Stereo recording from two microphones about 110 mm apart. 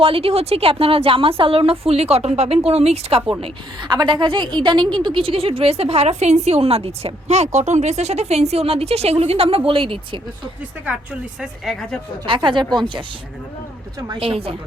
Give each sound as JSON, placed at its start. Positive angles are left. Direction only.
{"t": 0.0, "sound": "a woman's voice", "side_deg": -60}
{"t": 3.8, "sound": "a woman's voice", "side_deg": -45}
{"t": 11.3, "sound": "speech", "side_deg": 0}
{"t": 12.2, "sound": "speech", "side_deg": -50}
{"t": 14.2, "sound": "a woman's voice", "side_deg": -60}